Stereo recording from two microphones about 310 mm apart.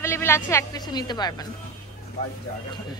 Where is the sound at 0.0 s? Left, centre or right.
Centre.